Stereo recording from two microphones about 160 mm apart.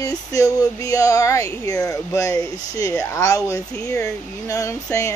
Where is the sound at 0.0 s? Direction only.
20° left (ahead or behind).